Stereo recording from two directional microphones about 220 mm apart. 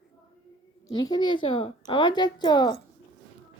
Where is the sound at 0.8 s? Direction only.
15° left (ahead or behind).